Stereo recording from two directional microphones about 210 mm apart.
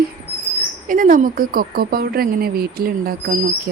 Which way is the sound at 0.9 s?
40° right (ahead or behind).